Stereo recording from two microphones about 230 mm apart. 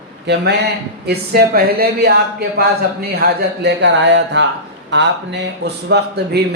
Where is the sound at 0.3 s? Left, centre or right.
Right.